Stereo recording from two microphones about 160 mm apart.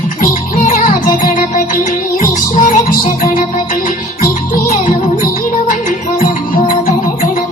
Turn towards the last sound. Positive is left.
turn(degrees=55)  # may be behind; listen again after turning